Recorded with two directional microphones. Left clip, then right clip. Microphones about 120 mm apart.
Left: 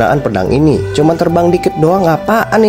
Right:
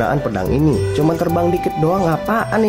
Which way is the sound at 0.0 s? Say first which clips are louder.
Left 7 dB; 35° left (ahead or behind).